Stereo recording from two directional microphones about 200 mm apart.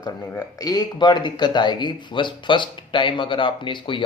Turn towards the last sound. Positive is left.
turn(degrees=25)  # may be behind; listen again after turning